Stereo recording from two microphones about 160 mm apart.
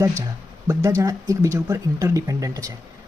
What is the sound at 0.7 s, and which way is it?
Speech, 20° right (ahead or behind).